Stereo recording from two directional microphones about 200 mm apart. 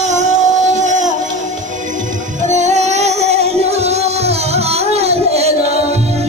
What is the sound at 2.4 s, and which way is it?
Music, 35° right (ahead or behind).